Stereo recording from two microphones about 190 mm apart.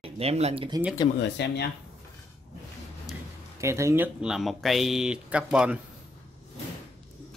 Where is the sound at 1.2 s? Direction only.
65° left (ahead or behind).